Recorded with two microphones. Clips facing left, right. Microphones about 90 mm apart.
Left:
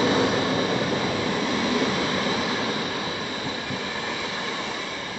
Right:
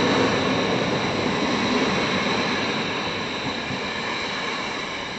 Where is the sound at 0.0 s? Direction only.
5° left (ahead or behind).